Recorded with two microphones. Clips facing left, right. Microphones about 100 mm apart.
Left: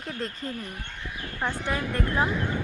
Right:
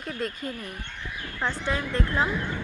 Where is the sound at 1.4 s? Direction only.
15° left (ahead or behind).